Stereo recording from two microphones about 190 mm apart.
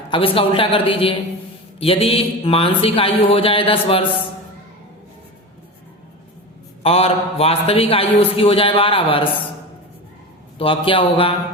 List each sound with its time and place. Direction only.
0.1 s a man's voice: 30° left (ahead or behind)
6.8 s a man's voice: 30° left (ahead or behind)
10.6 s a man's voice: 30° left (ahead or behind)